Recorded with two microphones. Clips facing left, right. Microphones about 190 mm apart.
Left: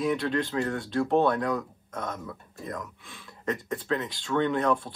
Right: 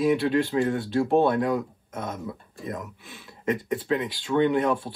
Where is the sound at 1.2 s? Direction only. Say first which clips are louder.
Right 3 dB; 25° right (ahead or behind).